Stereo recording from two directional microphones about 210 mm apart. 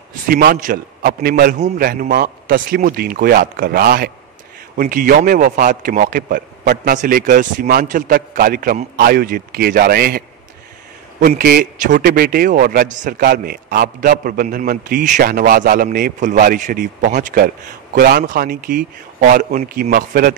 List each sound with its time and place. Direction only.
0.3 s a man's voice: 45° right (ahead or behind)